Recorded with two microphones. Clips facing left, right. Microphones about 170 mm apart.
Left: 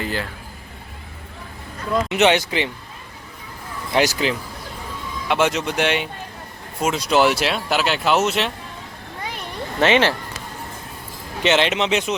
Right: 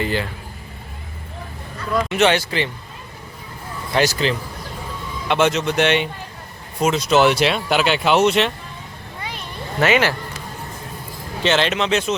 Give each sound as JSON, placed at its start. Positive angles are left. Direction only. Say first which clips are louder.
{"t": 0.0, "sound": "speech", "louder": "right 4 dB", "side_deg": 0}
{"t": 2.0, "sound": "speech", "louder": "even", "side_deg": 20}
{"t": 3.9, "sound": "speech", "louder": "even", "side_deg": 15}
{"t": 9.8, "sound": "speech", "louder": "left 1 dB", "side_deg": 25}
{"t": 11.4, "sound": "speech", "louder": "even", "side_deg": 20}